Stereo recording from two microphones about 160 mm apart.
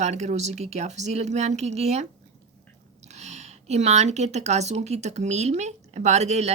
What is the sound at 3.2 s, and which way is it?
Speech, 45° right (ahead or behind).